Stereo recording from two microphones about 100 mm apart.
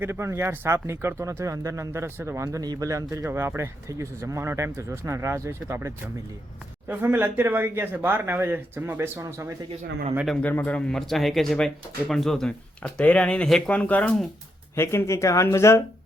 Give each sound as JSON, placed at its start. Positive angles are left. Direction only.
{"t": 0.0, "sound": "speech", "side_deg": -25}
{"t": 10.4, "sound": "speech", "side_deg": 20}
{"t": 14.8, "sound": "speech", "side_deg": 25}